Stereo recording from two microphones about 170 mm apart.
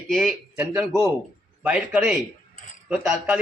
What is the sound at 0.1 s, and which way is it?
Speech, centre (ahead or behind).